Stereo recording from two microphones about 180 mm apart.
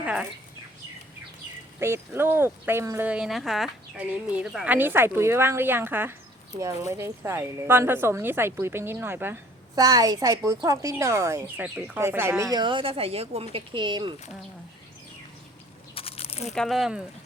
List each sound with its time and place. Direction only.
0.0 s bird: 5° right (ahead or behind)
1.8 s a woman's voice: 15° right (ahead or behind)
16.0 s crumpling: 30° left (ahead or behind)
16.5 s speech: centre (ahead or behind)